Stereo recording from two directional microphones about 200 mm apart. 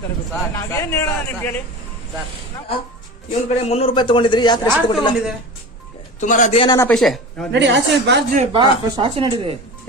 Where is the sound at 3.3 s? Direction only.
30° left (ahead or behind).